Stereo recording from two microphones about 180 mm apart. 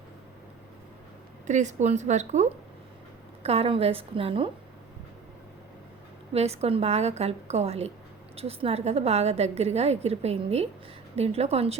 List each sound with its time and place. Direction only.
1.5 s a woman's voice: 40° right (ahead or behind)
6.3 s a woman's voice: 35° right (ahead or behind)